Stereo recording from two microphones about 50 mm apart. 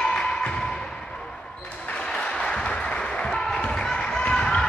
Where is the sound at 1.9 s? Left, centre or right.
Left.